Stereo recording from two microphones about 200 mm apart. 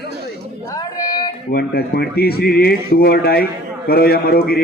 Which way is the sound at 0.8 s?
20° left (ahead or behind).